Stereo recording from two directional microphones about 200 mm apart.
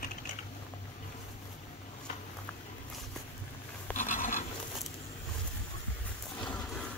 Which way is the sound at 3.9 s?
40° left (ahead or behind).